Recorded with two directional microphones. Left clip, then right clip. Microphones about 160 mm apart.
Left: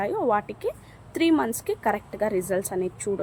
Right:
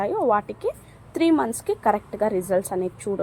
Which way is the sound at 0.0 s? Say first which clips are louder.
Right 3 dB; 10° right (ahead or behind).